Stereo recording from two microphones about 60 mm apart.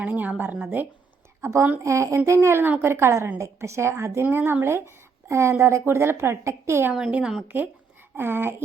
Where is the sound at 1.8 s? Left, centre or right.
Right.